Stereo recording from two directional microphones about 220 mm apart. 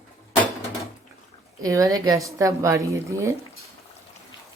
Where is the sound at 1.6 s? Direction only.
15° right (ahead or behind).